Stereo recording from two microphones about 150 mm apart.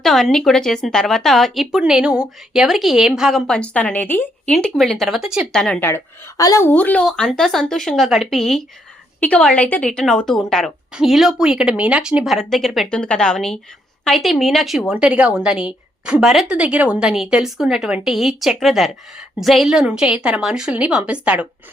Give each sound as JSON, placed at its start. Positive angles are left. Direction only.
{"t": 0.0, "sound": "a woman's voice", "side_deg": 0}
{"t": 4.5, "sound": "a woman's voice", "side_deg": 0}
{"t": 5.9, "sound": "a woman's voice", "side_deg": 25}
{"t": 6.7, "sound": "a woman's voice", "side_deg": 10}